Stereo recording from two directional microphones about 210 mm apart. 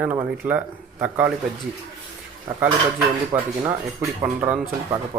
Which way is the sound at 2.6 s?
10° right (ahead or behind).